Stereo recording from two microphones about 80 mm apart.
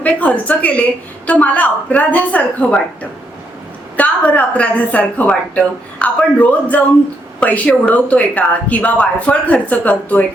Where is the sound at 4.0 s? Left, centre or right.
Centre.